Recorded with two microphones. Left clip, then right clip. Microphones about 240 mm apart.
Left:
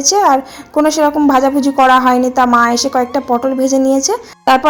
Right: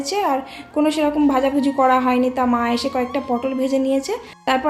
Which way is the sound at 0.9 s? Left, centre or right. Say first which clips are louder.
Left 8 dB; left.